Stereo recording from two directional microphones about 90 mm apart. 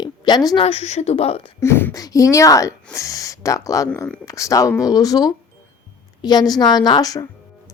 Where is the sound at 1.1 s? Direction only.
90° left.